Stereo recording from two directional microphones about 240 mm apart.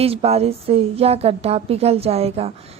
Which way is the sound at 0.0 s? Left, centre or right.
Right.